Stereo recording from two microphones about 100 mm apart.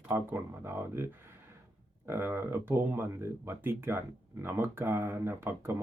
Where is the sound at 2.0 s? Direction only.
20° right (ahead or behind).